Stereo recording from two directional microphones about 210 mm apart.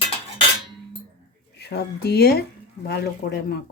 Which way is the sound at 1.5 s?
50° left (ahead or behind).